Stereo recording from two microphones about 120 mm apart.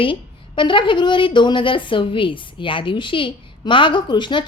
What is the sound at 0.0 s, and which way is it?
A woman's voice, 45° left (ahead or behind).